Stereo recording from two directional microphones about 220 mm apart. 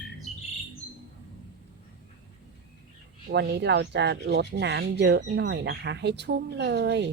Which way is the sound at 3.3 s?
50° right (ahead or behind).